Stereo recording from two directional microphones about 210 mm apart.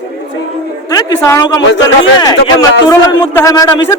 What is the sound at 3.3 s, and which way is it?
Speech, 15° left (ahead or behind).